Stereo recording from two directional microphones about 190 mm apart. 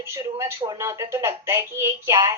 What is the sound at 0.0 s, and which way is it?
A woman's voice, 15° right (ahead or behind).